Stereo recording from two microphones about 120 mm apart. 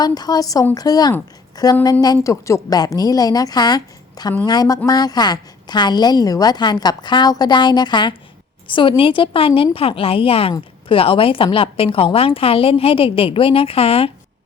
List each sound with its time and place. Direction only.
0.0 s a woman's voice: 35° left (ahead or behind); by 14.1 s 55° left (ahead or behind)